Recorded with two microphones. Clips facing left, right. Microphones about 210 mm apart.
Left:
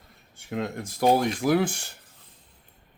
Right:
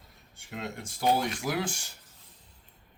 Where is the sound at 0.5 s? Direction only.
55° left (ahead or behind).